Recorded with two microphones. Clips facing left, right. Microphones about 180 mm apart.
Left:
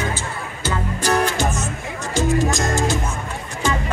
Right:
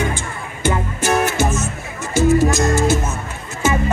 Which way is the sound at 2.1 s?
15° left (ahead or behind).